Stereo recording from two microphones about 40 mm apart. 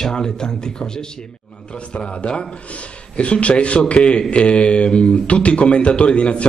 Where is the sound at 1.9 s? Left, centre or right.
Left.